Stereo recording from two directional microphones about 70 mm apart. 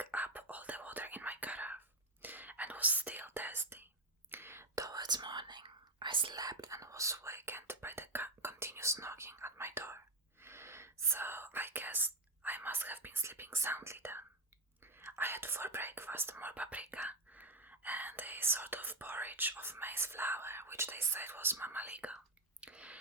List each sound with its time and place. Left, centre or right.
0.0 s whispering: right
4.7 s whispering: right; by 23.0 s centre